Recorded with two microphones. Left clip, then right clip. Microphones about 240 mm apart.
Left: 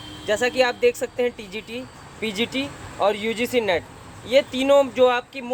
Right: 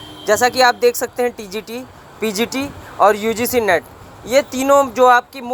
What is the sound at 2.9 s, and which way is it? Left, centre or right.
Speech, centre.